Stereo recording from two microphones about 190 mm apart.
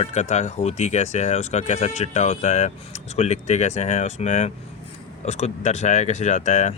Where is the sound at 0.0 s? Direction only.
35° left (ahead or behind).